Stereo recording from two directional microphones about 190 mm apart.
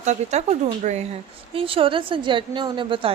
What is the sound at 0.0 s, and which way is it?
A woman's voice, 35° right (ahead or behind).